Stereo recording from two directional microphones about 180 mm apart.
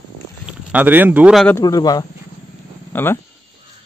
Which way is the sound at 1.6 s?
20° left (ahead or behind).